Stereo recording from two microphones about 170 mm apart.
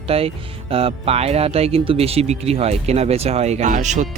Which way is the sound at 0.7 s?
35° right (ahead or behind).